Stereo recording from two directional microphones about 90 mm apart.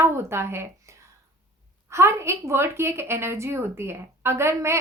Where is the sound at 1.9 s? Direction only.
30° right (ahead or behind).